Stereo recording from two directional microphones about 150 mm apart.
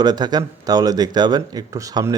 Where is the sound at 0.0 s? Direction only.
30° right (ahead or behind).